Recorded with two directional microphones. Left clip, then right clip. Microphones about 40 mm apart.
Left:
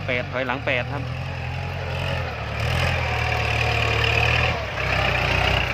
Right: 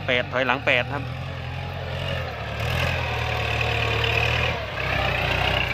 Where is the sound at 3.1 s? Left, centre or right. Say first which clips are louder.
Left 2 dB; right.